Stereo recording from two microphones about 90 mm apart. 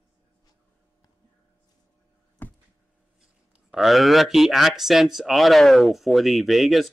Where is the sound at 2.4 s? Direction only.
20° left (ahead or behind).